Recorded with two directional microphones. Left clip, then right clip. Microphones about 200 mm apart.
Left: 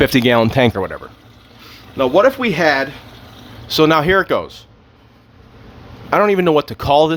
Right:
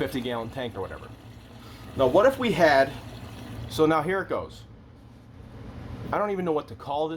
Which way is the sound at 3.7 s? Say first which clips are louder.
Left 11 dB; 45° left (ahead or behind).